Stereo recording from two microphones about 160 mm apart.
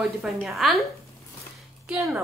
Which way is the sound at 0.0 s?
Centre (ahead or behind).